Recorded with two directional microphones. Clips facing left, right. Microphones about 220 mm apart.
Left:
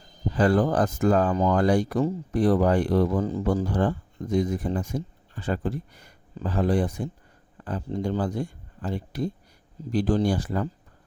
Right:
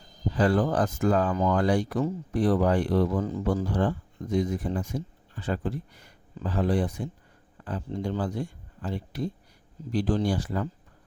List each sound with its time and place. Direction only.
0.3 s speech: 45° left (ahead or behind)
3.4 s speech: 45° left (ahead or behind)